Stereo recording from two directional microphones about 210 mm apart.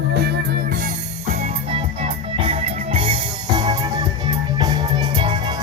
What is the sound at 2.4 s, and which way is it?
Music, 25° right (ahead or behind).